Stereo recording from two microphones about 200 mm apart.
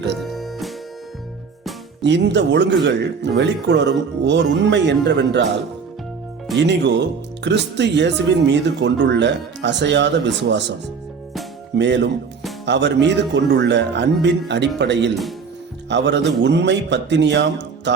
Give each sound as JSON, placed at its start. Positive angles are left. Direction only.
{"t": 0.2, "sound": "music", "side_deg": 0}
{"t": 2.0, "sound": "a man's voice", "side_deg": -60}
{"t": 6.6, "sound": "a man's voice", "side_deg": -60}